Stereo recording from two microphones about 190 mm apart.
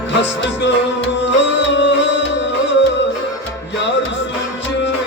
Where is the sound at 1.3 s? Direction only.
70° left (ahead or behind).